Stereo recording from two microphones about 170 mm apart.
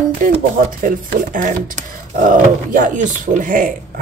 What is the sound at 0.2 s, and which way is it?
Speech, 50° right (ahead or behind).